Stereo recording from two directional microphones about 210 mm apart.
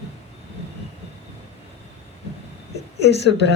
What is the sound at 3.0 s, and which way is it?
Speech, 55° left (ahead or behind).